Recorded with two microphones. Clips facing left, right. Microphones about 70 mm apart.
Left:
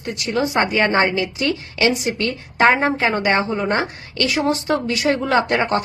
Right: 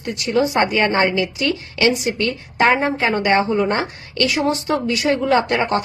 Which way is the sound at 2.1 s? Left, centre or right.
Centre.